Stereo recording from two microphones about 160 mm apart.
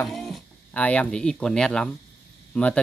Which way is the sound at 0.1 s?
5° left (ahead or behind).